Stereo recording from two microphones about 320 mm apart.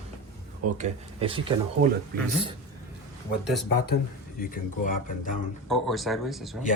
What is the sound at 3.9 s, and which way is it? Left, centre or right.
Speech, left.